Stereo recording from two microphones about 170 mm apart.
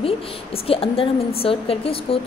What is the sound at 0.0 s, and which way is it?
A woman's voice, 35° left (ahead or behind).